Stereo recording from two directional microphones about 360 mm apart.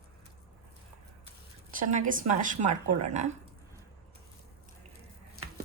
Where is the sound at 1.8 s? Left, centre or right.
Right.